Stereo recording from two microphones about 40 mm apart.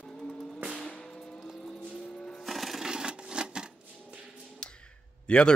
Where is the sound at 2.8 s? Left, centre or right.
Right.